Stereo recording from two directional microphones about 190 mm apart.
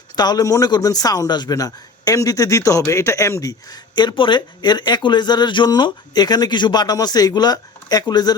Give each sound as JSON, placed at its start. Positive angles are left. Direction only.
{"t": 0.2, "sound": "speech", "side_deg": 20}